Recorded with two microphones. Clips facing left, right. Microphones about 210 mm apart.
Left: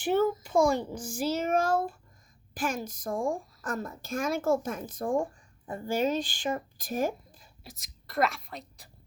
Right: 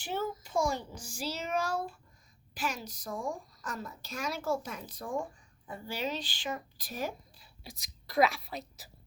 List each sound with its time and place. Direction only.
0.0 s a woman's voice: 55° left (ahead or behind)
7.6 s speech: centre (ahead or behind)